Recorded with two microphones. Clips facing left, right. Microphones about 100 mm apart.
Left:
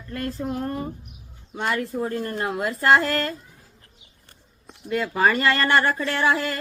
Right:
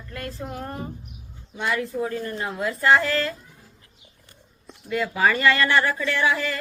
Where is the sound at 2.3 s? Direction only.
60° left (ahead or behind).